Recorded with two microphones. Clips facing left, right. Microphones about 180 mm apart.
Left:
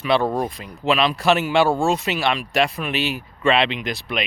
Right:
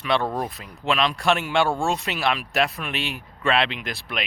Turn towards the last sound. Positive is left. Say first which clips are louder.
# left 5 dB
turn(degrees=0)  # may be behind; listen again after turning